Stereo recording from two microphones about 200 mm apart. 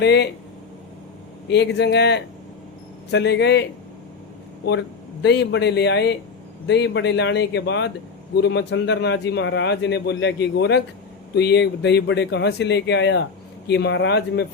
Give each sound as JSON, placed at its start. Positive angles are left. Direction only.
{"t": 0.0, "sound": "a man's voice", "side_deg": 55}
{"t": 1.5, "sound": "a man's voice", "side_deg": 60}